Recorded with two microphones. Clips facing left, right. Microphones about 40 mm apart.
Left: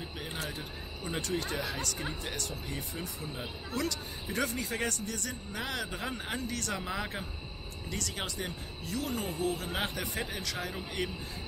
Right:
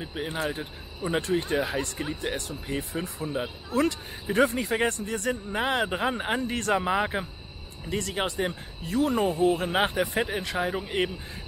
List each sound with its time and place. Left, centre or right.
0.0 s speech: right